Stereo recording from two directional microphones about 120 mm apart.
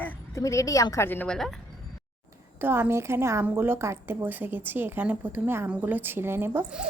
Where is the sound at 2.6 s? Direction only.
15° right (ahead or behind).